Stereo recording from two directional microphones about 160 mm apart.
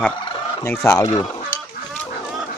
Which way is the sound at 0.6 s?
20° left (ahead or behind).